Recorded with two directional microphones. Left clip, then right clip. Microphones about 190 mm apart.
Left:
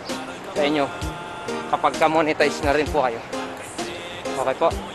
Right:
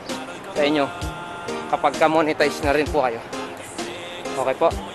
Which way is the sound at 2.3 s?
5° right (ahead or behind).